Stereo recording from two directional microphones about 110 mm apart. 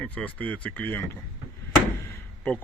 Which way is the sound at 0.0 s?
10° left (ahead or behind).